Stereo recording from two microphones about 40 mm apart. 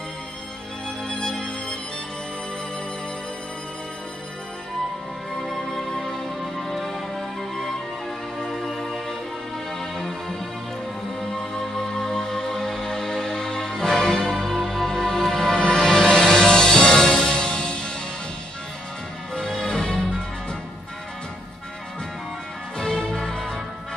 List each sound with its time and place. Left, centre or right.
1.0 s music: centre
5.5 s music: centre
11.3 s music: centre
14.4 s music: centre
19.3 s music: centre
22.8 s music: centre